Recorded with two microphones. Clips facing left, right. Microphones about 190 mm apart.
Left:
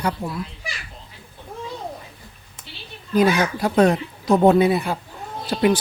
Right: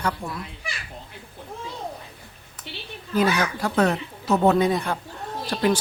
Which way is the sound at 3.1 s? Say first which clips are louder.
Left 4 dB; 15° left (ahead or behind).